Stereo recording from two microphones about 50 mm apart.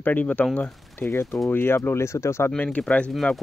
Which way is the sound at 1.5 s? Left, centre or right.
Left.